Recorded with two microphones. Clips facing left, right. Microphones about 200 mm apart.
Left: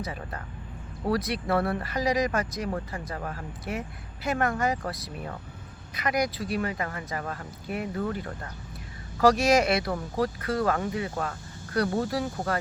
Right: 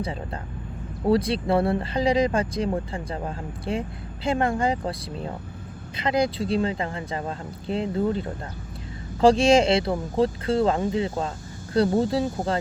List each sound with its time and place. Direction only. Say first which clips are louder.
0.0 s speech: right 5 dB; 25° right (ahead or behind)